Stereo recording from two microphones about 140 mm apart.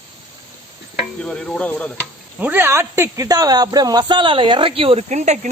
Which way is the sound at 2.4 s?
15° right (ahead or behind).